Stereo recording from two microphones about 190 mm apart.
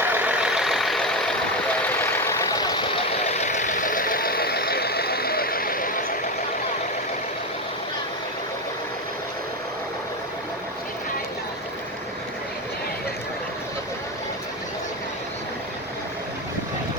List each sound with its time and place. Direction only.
0.0 s vehicle: 10° right (ahead or behind)
2.0 s vehicle: 15° left (ahead or behind)
3.2 s vehicle: 35° left (ahead or behind)